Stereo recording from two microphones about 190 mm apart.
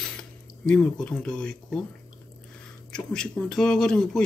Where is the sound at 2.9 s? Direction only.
5° left (ahead or behind).